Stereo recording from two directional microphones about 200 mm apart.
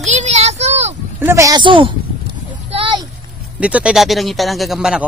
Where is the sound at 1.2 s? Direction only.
15° right (ahead or behind).